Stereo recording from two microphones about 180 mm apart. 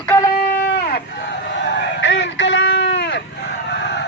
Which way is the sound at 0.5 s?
75° left (ahead or behind).